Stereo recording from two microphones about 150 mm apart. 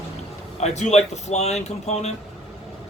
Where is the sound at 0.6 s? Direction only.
50° left (ahead or behind).